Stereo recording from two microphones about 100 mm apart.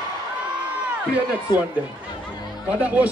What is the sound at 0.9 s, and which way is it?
Speech, 15° right (ahead or behind).